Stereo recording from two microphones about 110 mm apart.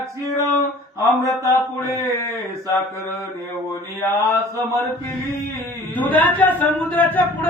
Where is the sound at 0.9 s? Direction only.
30° left (ahead or behind).